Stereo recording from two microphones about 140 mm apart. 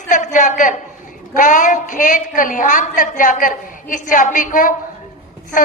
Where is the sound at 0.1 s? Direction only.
60° left (ahead or behind).